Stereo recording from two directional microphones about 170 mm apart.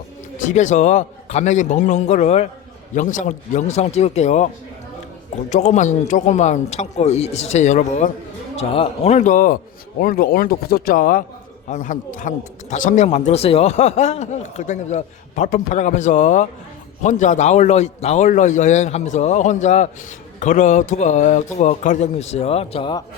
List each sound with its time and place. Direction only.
0.3 s a man's voice: 45° left (ahead or behind)
5.5 s a man's voice: 45° left (ahead or behind); by 23.0 s 30° left (ahead or behind)